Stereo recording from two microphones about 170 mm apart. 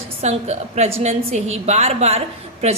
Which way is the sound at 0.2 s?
40° right (ahead or behind).